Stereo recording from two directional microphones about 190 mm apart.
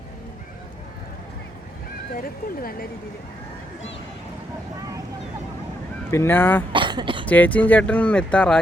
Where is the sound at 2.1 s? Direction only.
50° left (ahead or behind).